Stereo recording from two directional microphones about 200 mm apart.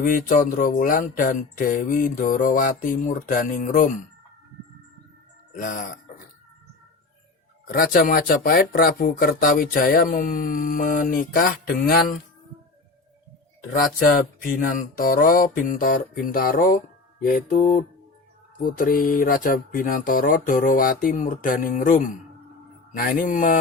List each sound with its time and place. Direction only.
0.0 s music: 45° left (ahead or behind)
5.5 s mantra: 40° left (ahead or behind)
7.7 s music: 45° left (ahead or behind)
13.7 s music: 45° left (ahead or behind)
22.9 s mantra: 45° left (ahead or behind)